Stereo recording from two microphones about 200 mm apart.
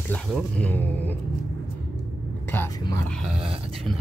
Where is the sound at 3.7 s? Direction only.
Centre (ahead or behind).